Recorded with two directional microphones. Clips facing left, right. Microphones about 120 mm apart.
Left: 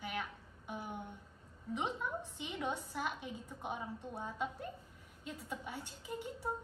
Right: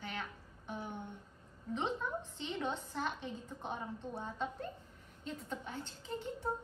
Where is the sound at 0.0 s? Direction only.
10° left (ahead or behind).